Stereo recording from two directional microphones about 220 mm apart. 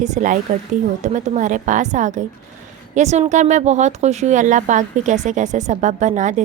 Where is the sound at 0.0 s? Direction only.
35° right (ahead or behind).